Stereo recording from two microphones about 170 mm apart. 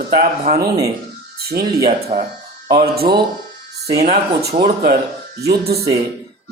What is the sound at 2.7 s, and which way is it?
Speech, 65° right (ahead or behind).